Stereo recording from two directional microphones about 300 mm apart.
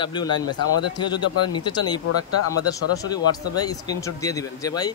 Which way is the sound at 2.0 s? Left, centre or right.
Left.